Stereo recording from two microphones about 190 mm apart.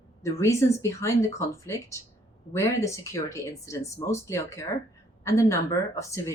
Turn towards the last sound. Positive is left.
turn(degrees=15)  # may be behind; listen again after turning